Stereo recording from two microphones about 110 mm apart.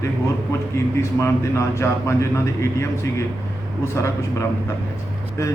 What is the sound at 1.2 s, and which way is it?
A man's voice, 25° left (ahead or behind).